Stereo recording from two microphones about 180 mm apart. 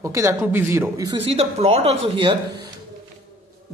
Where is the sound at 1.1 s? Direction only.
30° right (ahead or behind).